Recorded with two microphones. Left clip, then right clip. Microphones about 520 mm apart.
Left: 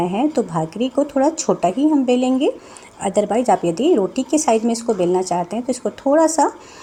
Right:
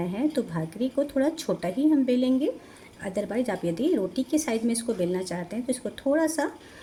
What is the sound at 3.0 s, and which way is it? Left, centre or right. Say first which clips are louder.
A woman's voice: left 11 dB; right.